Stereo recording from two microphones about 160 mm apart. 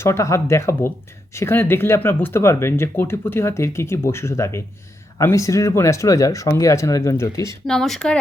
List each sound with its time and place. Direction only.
0.0 s speech: 15° left (ahead or behind)
7.7 s speech: 5° left (ahead or behind)